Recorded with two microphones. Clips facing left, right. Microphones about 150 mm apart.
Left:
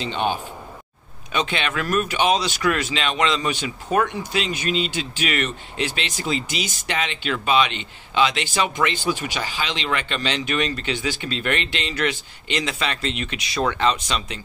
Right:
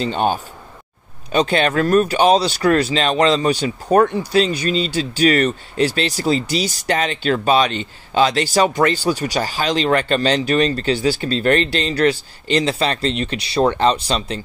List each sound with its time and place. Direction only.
0.0 s speech: 40° right (ahead or behind)